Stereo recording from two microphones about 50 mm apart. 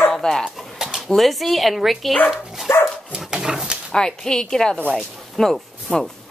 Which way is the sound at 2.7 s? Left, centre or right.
Left.